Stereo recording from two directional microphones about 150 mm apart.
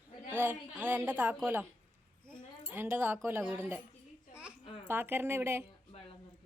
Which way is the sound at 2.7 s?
15° right (ahead or behind).